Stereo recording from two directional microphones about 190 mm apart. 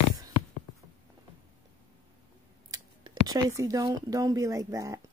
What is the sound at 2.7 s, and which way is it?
Scissors, 20° right (ahead or behind).